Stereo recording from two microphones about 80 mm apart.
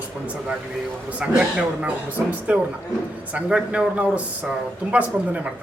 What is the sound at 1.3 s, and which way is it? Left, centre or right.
A man's voice, centre.